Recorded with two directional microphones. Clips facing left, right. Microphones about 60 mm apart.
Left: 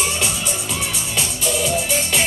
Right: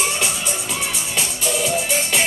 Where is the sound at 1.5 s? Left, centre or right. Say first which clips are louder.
Even; right.